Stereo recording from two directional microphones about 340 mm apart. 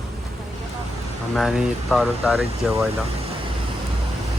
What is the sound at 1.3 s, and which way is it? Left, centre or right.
Speech, centre.